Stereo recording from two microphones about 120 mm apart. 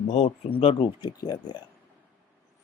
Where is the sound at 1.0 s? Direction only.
35° left (ahead or behind).